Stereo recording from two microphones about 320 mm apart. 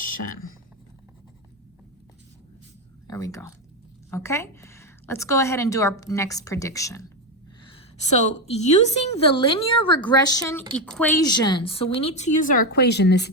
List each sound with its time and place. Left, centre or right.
3.1 s a woman's voice: centre; by 13.3 s left